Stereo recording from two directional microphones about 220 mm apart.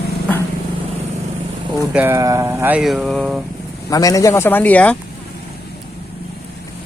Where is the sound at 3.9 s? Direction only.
15° left (ahead or behind).